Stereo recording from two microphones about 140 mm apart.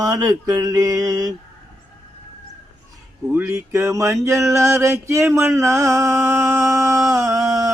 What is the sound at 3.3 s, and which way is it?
Mantra, 20° right (ahead or behind).